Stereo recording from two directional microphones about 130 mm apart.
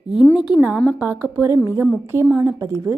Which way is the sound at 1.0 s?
15° right (ahead or behind).